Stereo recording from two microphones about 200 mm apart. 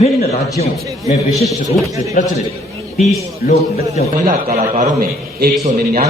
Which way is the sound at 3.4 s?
45° left (ahead or behind).